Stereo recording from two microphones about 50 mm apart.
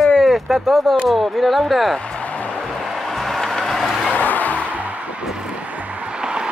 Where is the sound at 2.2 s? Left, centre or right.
Left.